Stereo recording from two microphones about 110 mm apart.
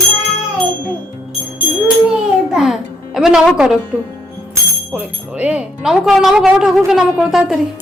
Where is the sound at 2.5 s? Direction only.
5° right (ahead or behind).